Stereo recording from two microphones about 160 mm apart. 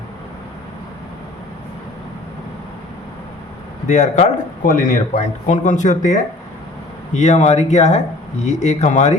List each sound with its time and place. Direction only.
3.8 s speech: 50° left (ahead or behind)